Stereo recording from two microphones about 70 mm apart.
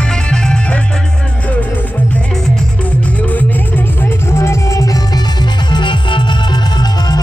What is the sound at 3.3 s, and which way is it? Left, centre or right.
Music, left.